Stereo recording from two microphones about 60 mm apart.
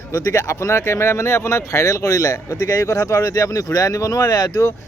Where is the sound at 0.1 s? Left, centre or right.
Left.